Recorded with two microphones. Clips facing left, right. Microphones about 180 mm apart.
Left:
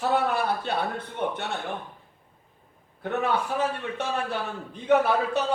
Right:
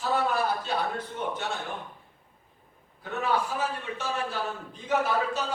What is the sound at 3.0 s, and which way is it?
A man's voice, 60° left (ahead or behind).